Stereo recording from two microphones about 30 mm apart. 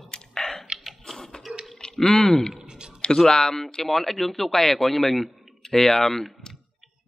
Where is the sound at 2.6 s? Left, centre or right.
Right.